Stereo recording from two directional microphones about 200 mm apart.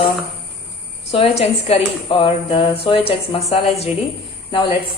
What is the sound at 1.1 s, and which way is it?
A woman's voice, 30° left (ahead or behind).